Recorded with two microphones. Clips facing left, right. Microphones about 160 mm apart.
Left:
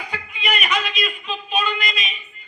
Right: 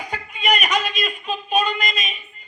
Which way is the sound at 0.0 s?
45° right (ahead or behind).